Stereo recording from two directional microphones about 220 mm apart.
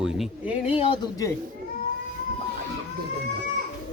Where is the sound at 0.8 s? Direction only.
20° left (ahead or behind).